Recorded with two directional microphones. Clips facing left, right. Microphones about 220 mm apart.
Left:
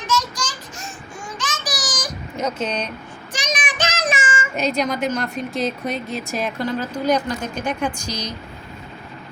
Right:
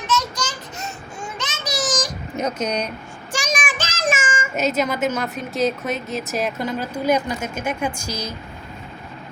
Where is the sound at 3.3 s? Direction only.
45° right (ahead or behind).